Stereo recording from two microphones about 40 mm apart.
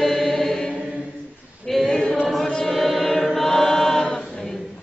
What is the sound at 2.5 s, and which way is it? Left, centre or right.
Chant, left.